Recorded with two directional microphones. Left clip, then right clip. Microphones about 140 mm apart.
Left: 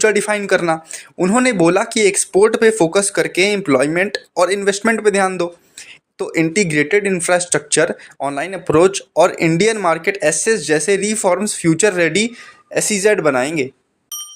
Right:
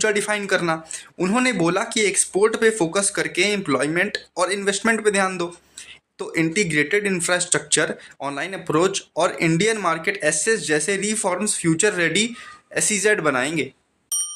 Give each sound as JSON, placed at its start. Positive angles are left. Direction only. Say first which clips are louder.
{"t": 0.0, "sound": "speech", "louder": "left 6 dB", "side_deg": 35}